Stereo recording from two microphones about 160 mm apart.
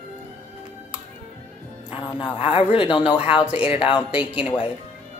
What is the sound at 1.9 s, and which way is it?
Speech, 30° left (ahead or behind).